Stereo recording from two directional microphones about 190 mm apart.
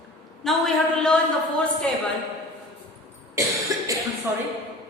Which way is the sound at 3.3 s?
15° right (ahead or behind).